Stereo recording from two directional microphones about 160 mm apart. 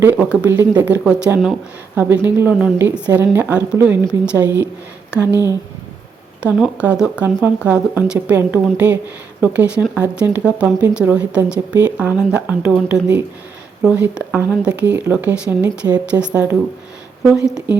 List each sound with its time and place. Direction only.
0.0 s speech: 10° right (ahead or behind)
0.4 s speech: 20° right (ahead or behind)
6.4 s speech: 10° right (ahead or behind)